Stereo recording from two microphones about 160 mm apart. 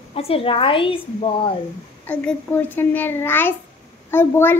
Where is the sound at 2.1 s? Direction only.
10° left (ahead or behind).